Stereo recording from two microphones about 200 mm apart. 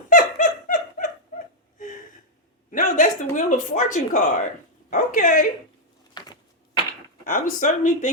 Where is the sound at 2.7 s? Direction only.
40° left (ahead or behind).